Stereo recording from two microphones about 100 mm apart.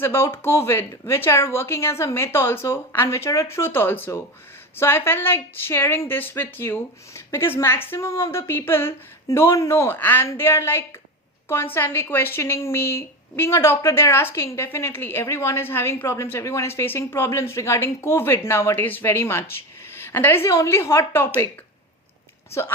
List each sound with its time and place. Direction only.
0.0 s speech: 25° left (ahead or behind)